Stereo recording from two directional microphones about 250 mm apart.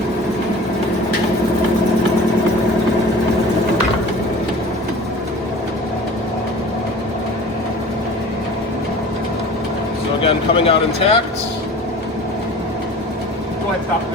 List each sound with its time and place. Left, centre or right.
10.2 s speech: left